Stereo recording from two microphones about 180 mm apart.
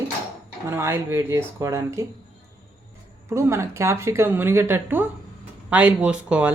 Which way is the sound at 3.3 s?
15° right (ahead or behind).